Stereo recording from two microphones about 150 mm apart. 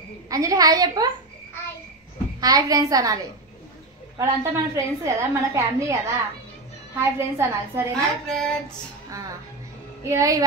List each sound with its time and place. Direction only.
0.3 s a woman's voice: 25° right (ahead or behind)
2.4 s a woman's voice: 25° right (ahead or behind)
4.2 s a woman's voice: 20° right (ahead or behind)
7.0 s a woman's voice: 15° right (ahead or behind)
7.9 s child singing: 5° left (ahead or behind)
10.0 s a woman's voice: 20° right (ahead or behind)